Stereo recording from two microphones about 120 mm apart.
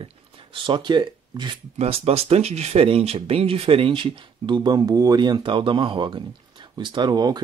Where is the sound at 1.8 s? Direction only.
60° right (ahead or behind).